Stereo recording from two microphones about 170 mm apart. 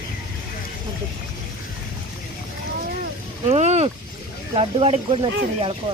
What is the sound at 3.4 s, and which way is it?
Boat, 40° right (ahead or behind).